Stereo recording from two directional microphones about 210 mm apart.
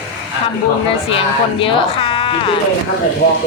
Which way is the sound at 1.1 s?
25° left (ahead or behind).